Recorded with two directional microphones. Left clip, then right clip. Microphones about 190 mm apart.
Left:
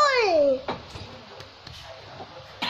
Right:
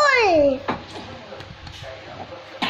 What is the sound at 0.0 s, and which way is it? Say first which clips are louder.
Babbling: right 4 dB; centre (ahead or behind).